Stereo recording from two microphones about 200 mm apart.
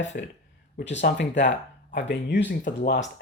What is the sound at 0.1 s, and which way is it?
Speech, 50° left (ahead or behind).